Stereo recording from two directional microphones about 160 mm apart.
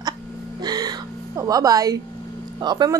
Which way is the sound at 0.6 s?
25° right (ahead or behind).